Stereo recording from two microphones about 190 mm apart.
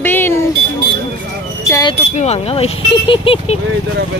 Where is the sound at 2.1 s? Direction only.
35° left (ahead or behind).